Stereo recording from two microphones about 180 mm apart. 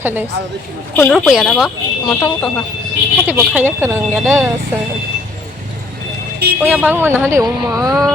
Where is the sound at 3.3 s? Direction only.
10° right (ahead or behind).